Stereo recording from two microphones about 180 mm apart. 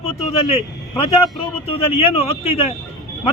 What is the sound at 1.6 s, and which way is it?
Speech, 30° left (ahead or behind).